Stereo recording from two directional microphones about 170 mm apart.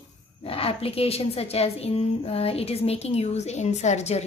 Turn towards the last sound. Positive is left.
turn(degrees=40)  # may be behind; listen again after turning